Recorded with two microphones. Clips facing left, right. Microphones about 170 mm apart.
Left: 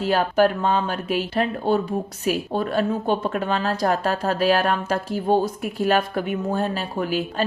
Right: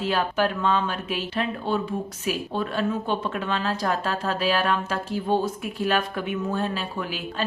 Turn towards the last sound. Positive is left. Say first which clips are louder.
# left 6 dB
turn(degrees=40)  # may be behind; listen again after turning